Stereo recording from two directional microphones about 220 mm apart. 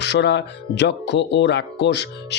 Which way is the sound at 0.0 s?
50° left (ahead or behind).